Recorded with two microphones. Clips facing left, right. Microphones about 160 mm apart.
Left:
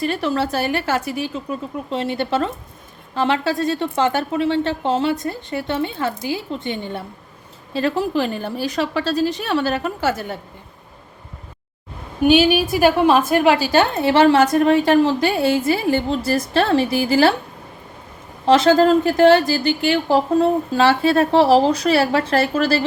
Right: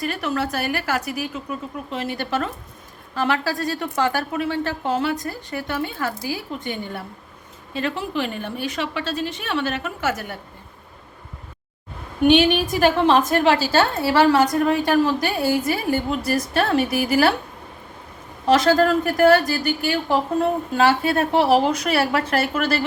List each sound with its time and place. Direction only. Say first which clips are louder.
0.0 s a woman's voice: left 4 dB; 30° left (ahead or behind)
12.2 s a woman's voice: left 2 dB; 5° left (ahead or behind); by 17.3 s 25° left (ahead or behind)
18.4 s a woman's voice: left 3 dB; 25° left (ahead or behind)